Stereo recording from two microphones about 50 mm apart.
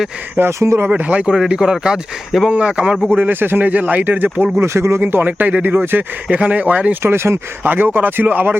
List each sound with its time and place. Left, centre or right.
0.6 s speech: right
0.9 s speech: right
1.4 s speech: centre
3.2 s speech: right
3.7 s speech: right
4.6 s speech: right
6.2 s speech: right
7.0 s speech: right
7.6 s speech: right